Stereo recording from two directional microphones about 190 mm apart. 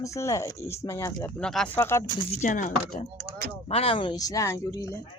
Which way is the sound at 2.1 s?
40° left (ahead or behind).